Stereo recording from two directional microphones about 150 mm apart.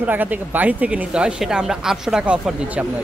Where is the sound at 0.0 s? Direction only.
10° right (ahead or behind).